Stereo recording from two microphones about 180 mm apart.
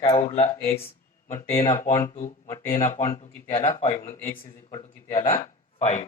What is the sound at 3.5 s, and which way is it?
Speech, 35° left (ahead or behind).